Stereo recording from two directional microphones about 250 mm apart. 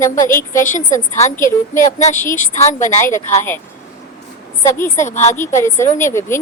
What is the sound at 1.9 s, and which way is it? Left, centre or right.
A woman's voice, left.